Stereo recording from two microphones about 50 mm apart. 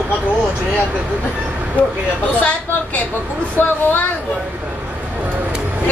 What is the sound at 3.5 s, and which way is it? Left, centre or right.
Speech, left.